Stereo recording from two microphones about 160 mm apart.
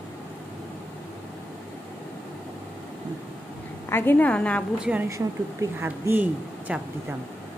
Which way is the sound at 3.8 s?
15° left (ahead or behind).